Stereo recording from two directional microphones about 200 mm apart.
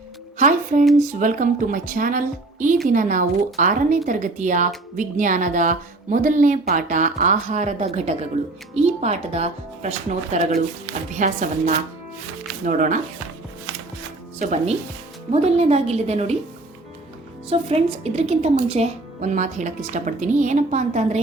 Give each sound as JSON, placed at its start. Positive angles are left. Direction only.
{"t": 0.3, "sound": "speech", "side_deg": -40}
{"t": 14.3, "sound": "speech", "side_deg": -35}
{"t": 17.5, "sound": "speech", "side_deg": -30}